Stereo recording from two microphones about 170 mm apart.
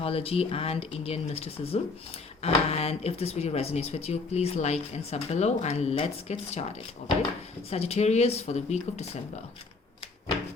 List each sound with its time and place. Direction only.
0.0 s speech: 35° left (ahead or behind)
7.7 s speech: 40° left (ahead or behind)